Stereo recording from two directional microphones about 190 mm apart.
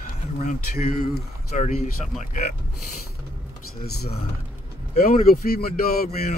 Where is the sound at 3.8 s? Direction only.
55° left (ahead or behind).